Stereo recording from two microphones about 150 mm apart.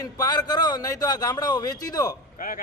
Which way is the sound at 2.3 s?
65° left (ahead or behind).